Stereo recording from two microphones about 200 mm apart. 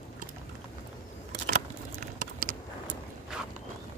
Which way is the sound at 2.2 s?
45° right (ahead or behind).